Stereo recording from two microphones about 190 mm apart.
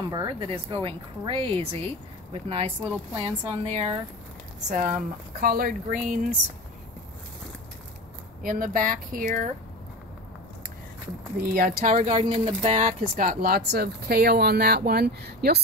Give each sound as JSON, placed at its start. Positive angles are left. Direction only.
{"t": 0.1, "sound": "a woman's voice", "side_deg": -25}
{"t": 4.6, "sound": "speech", "side_deg": -45}
{"t": 8.4, "sound": "speech", "side_deg": -45}
{"t": 11.4, "sound": "speech", "side_deg": -50}
{"t": 12.1, "sound": "speech", "side_deg": -30}